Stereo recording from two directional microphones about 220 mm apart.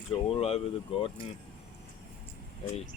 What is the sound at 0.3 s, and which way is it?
Speech, 30° left (ahead or behind).